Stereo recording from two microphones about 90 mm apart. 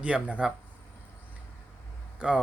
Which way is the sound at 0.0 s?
15° right (ahead or behind).